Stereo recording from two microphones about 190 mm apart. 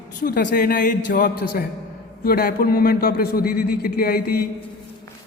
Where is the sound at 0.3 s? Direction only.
50° left (ahead or behind).